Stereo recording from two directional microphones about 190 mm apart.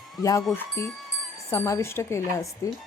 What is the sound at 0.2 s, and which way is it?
Speech, 20° left (ahead or behind).